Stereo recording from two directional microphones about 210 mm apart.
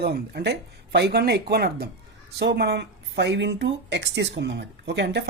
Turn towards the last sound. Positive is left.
turn(degrees=-55)  # may be behind; listen again after turning